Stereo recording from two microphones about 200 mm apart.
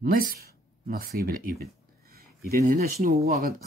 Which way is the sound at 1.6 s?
50° right (ahead or behind).